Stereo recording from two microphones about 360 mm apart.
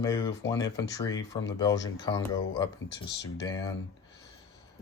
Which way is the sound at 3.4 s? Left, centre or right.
Centre.